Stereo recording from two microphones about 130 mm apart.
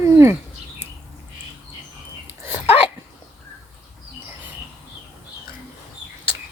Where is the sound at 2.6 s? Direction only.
45° left (ahead or behind).